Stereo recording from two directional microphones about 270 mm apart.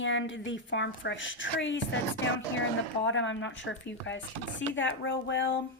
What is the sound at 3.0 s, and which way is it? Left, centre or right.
A woman's voice, left.